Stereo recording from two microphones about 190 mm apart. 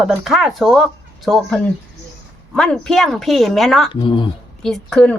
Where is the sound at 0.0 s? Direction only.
5° right (ahead or behind).